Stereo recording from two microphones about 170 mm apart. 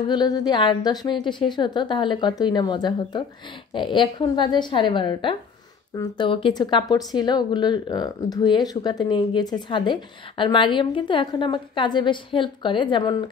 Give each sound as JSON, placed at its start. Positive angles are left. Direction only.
{"t": 0.1, "sound": "speech", "side_deg": 25}